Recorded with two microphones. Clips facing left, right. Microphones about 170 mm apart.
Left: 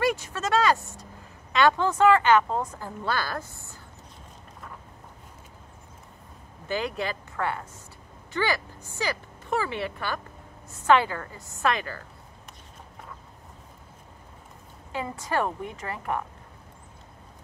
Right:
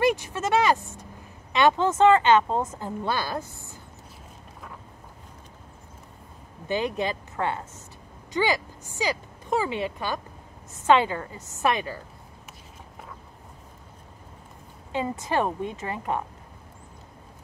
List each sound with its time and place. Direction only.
0.0 s a sound: 15° right (ahead or behind)
1.5 s speech: 20° right (ahead or behind)
6.7 s speech: 20° right (ahead or behind)
14.9 s speech: 20° right (ahead or behind)